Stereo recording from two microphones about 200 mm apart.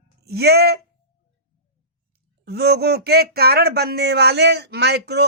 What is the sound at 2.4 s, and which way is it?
Speech, 55° right (ahead or behind).